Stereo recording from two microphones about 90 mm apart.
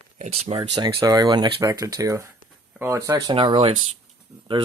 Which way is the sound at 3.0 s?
45° right (ahead or behind).